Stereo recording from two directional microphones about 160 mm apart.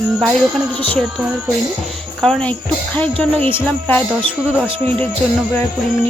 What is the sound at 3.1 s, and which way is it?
Speech, 35° right (ahead or behind).